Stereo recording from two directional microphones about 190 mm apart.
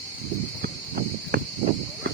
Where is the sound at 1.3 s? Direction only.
55° right (ahead or behind).